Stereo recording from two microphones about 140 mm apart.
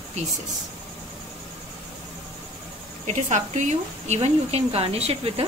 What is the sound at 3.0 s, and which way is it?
A woman's voice, 60° right (ahead or behind).